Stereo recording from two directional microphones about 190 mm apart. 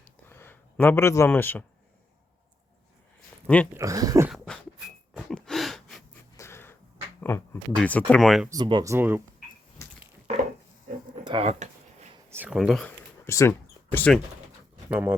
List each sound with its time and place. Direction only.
0.0 s a sound: 10° left (ahead or behind)
3.4 s speech: 5° left (ahead or behind)
3.8 s speech: 15° right (ahead or behind)
4.3 s beatboxing: 5° left (ahead or behind)
5.1 s gasp: 5° left (ahead or behind)
6.3 s a sound: 15° left (ahead or behind)
7.2 s speech: 10° left (ahead or behind)
8.4 s speech: 20° right (ahead or behind)
9.8 s a sound: 15° left (ahead or behind)
11.2 s a sound: 25° right (ahead or behind)
12.3 s speech: 5° right (ahead or behind)
13.2 s speech: 15° left (ahead or behind)
14.8 s speech: 10° right (ahead or behind)